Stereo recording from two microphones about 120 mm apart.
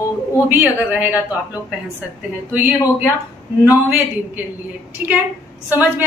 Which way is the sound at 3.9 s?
20° right (ahead or behind).